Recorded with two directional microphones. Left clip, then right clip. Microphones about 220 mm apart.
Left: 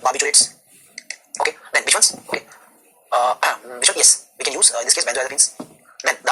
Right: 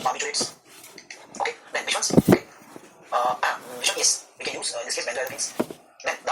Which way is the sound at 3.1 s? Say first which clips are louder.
Left 6 dB; 50° left (ahead or behind).